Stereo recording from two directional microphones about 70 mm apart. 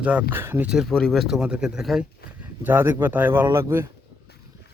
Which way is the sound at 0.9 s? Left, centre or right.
Centre.